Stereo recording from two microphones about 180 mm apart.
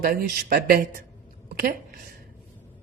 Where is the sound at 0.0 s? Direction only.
55° right (ahead or behind).